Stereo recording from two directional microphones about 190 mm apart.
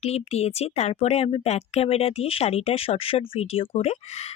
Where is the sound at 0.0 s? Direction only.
35° left (ahead or behind).